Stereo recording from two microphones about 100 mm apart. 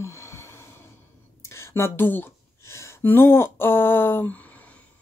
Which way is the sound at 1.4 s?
30° left (ahead or behind).